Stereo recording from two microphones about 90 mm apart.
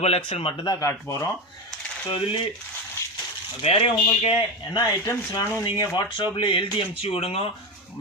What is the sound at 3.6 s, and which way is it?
Speech, 90° left.